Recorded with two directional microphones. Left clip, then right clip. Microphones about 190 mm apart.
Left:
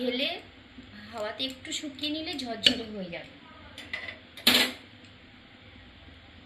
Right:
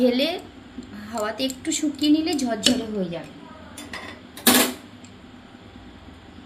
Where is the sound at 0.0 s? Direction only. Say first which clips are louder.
Right 9 dB; 90° right.